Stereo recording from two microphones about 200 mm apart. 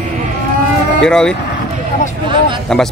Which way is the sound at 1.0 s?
5° left (ahead or behind).